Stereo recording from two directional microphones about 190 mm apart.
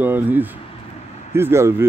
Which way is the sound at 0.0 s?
10° right (ahead or behind).